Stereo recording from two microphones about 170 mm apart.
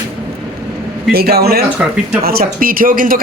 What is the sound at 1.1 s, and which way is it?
Speech, 65° right (ahead or behind).